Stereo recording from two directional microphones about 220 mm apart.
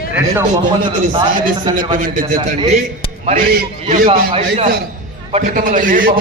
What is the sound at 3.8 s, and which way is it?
Speech, 25° right (ahead or behind).